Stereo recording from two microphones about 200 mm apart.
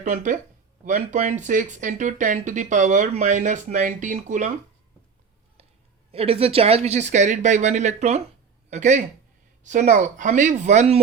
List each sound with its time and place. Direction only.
0.0 s speech: 35° right (ahead or behind)
6.1 s speech: 30° right (ahead or behind)